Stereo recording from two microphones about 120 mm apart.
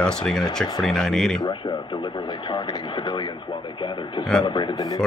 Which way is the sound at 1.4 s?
40° left (ahead or behind).